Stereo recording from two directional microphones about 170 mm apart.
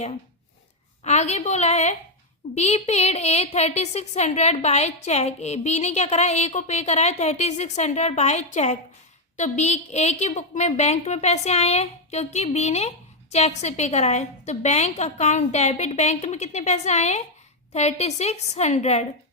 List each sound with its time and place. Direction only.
1.0 s a woman's voice: 40° left (ahead or behind)